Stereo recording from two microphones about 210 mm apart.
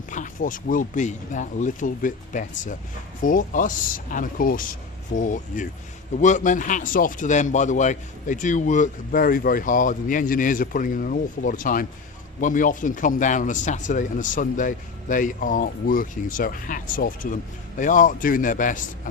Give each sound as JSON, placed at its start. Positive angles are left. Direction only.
{"t": 0.1, "sound": "speech", "side_deg": 40}